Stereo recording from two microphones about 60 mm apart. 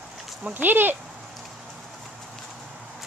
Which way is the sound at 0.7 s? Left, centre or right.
Right.